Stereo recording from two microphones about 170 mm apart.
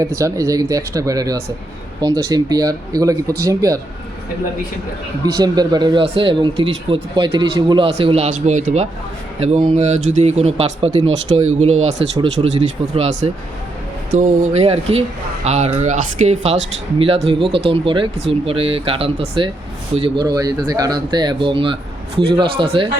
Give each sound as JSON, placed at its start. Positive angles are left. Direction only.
{"t": 0.0, "sound": "speech", "side_deg": -20}
{"t": 5.4, "sound": "speech", "side_deg": -25}
{"t": 20.0, "sound": "speech", "side_deg": -25}